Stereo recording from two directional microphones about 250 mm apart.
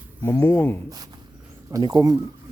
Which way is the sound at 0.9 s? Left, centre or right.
Centre.